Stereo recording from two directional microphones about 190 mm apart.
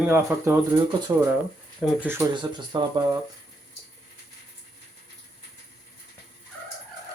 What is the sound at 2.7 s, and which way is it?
Speech, 25° right (ahead or behind).